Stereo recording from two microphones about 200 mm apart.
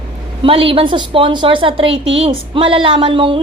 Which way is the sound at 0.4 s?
25° right (ahead or behind).